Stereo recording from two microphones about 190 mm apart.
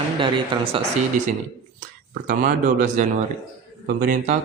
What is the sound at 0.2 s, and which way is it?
Speech, 25° right (ahead or behind).